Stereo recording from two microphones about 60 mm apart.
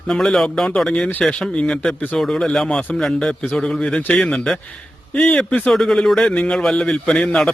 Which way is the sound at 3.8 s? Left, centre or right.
Left.